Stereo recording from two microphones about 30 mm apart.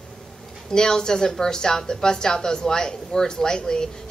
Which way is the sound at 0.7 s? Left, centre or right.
Left.